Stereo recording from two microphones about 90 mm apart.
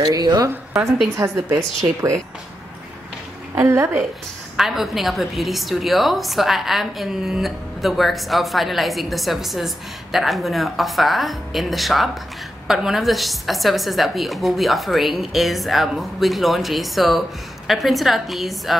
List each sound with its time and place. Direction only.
0.0 s a woman's voice: 50° right (ahead or behind)
1.2 s speech: 35° right (ahead or behind)
3.5 s speech: 30° right (ahead or behind)
4.6 s a woman's voice: 5° right (ahead or behind)